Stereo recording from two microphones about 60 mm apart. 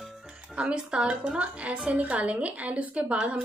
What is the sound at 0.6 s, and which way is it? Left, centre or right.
A woman's voice, centre.